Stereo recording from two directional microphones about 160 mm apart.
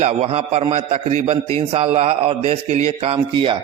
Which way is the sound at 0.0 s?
40° right (ahead or behind).